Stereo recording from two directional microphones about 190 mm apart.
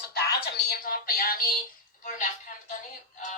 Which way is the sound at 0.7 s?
50° left (ahead or behind).